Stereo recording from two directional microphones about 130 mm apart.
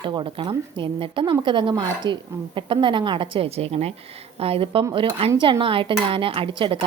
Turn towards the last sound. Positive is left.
turn(degrees=-45)  # may be behind; listen again after turning